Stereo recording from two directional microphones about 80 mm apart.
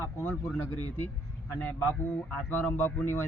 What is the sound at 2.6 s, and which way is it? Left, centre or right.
Speech, left.